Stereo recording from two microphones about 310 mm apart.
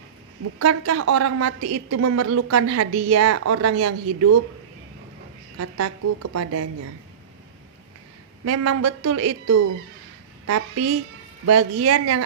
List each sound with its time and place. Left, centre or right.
0.6 s a woman's voice: right
5.5 s a woman's voice: right
8.4 s a woman's voice: right